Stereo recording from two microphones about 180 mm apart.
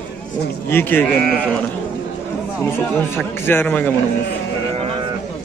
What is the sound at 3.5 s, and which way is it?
Speech, 10° left (ahead or behind).